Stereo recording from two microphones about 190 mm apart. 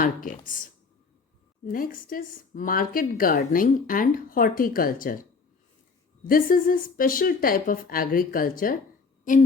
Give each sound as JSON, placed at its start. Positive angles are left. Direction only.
{"t": 0.0, "sound": "a woman's voice", "side_deg": 45}
{"t": 1.7, "sound": "a woman's voice", "side_deg": 45}
{"t": 6.2, "sound": "a woman's voice", "side_deg": 50}